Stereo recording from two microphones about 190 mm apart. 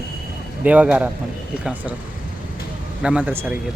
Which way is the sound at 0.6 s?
10° right (ahead or behind).